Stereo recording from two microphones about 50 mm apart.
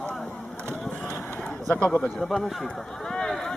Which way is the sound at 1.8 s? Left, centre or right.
Left.